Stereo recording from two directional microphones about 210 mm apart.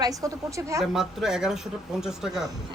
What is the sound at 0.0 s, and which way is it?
Speech, 15° right (ahead or behind).